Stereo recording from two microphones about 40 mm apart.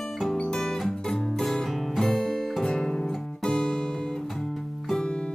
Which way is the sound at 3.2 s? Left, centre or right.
Centre.